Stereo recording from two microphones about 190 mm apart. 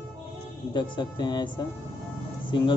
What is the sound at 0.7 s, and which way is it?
Speech, 25° left (ahead or behind).